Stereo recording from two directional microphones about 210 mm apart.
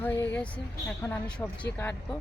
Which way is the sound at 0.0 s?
10° left (ahead or behind).